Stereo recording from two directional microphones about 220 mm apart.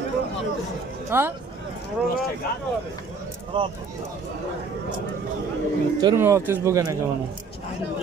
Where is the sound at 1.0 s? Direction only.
10° right (ahead or behind).